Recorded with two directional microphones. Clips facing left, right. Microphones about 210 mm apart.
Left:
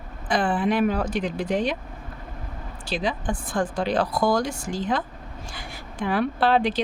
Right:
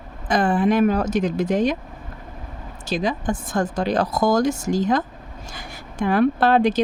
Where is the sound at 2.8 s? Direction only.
45° right (ahead or behind).